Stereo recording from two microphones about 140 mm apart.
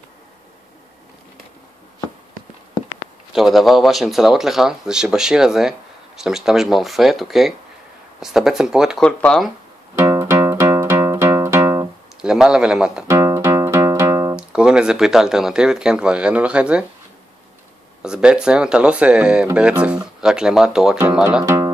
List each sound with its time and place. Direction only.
3.3 s speech: centre (ahead or behind)
9.0 s speech: 5° left (ahead or behind)
9.9 s music: 20° right (ahead or behind)
12.2 s speech: 5° right (ahead or behind)
13.1 s music: 20° right (ahead or behind)
14.3 s speech: 5° right (ahead or behind)
18.0 s speech: 5° right (ahead or behind)
21.5 s music: 30° right (ahead or behind)